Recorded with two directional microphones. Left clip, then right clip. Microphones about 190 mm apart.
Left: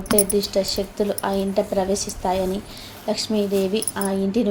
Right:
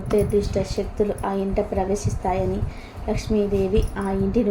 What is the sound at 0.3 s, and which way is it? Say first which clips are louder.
A woman's voice: left 2 dB; 20° left (ahead or behind).